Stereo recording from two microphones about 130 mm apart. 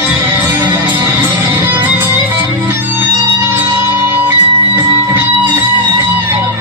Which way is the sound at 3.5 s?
15° right (ahead or behind).